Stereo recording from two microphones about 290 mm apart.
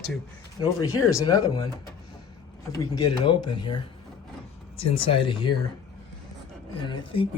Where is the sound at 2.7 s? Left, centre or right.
Centre.